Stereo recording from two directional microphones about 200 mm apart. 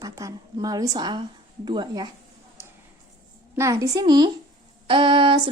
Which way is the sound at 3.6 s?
15° right (ahead or behind).